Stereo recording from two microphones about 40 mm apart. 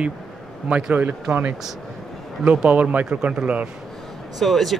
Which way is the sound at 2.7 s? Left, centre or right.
Right.